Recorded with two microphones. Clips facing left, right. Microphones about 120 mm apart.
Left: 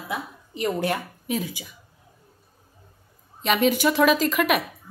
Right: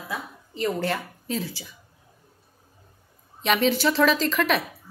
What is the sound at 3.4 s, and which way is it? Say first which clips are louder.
A woman's voice: left 1 dB; 5° left (ahead or behind).